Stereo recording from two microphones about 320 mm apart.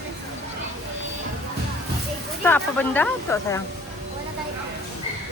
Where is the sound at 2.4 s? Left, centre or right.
Centre.